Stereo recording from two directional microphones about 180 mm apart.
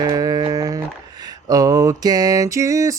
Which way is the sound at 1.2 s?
20° right (ahead or behind).